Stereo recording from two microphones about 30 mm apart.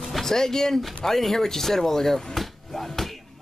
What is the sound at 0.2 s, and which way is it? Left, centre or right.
Speech, centre.